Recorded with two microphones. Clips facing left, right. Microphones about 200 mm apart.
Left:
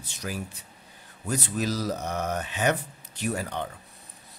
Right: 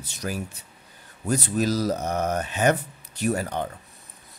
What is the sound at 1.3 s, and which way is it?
Speech, 40° right (ahead or behind).